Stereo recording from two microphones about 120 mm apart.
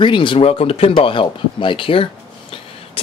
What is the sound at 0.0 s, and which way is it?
Speech, 45° left (ahead or behind).